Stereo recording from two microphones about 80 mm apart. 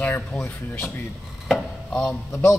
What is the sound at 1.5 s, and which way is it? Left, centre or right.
Chopping, centre.